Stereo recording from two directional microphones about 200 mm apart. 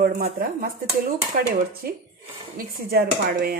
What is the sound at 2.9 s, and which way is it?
Speech, 50° right (ahead or behind).